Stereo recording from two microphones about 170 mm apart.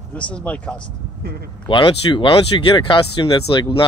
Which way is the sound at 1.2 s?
70° right (ahead or behind).